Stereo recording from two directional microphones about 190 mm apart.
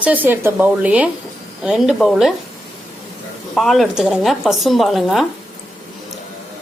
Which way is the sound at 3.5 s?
Centre (ahead or behind).